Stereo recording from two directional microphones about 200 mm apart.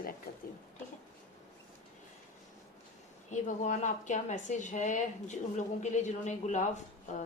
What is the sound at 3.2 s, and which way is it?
A woman's voice, 40° left (ahead or behind).